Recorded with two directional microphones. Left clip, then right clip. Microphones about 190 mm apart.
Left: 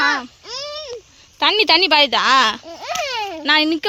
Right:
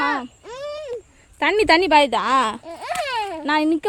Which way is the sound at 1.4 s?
20° right (ahead or behind).